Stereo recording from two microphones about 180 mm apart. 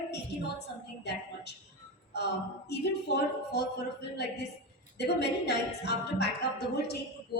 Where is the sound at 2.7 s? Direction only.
65° left (ahead or behind).